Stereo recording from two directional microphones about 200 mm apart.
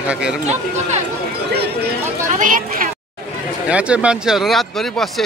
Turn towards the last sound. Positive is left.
turn(degrees=0)  # may be behind; listen again after turning